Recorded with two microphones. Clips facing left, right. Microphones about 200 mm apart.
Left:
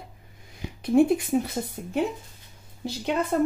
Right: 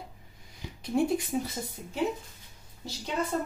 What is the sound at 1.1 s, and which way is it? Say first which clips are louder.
Speech: left 5 dB; 60° left (ahead or behind).